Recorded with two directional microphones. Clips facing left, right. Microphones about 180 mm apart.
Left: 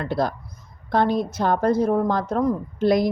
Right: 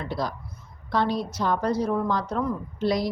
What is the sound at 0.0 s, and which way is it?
A woman's voice, 55° left (ahead or behind).